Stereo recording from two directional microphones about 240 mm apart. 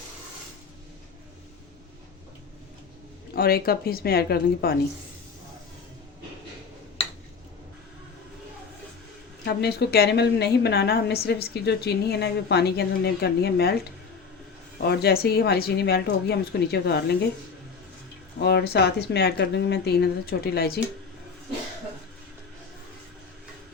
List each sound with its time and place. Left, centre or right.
3.3 s speech: left
9.4 s a woman's voice: left
14.8 s a woman's voice: left
18.3 s a woman's voice: left